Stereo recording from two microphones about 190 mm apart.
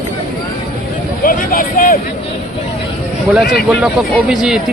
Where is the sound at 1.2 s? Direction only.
50° left (ahead or behind).